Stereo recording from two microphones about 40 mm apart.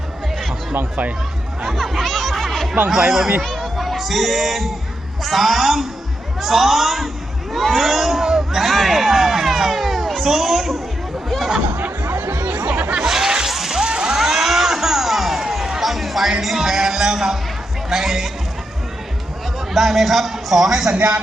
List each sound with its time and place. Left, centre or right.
1.7 s speech: centre
7.5 s crowd: centre
10.2 s speech: centre
12.1 s music: right
12.6 s music: right
13.0 s a sound: centre
13.8 s vehicle: right
14.2 s a sound: centre
16.4 s music: centre
19.7 s speech: centre
20.9 s a man's voice: right